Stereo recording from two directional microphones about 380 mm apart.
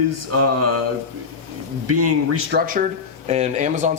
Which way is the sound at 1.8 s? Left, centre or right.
Right.